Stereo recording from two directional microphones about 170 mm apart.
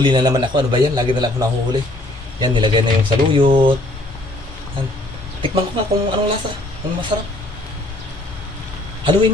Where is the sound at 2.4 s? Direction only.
25° right (ahead or behind).